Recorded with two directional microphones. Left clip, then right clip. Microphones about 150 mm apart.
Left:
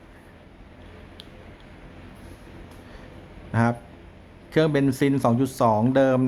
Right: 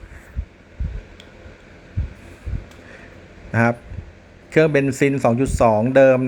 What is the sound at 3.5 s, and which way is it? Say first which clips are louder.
Speech: right 6 dB; 15° right (ahead or behind).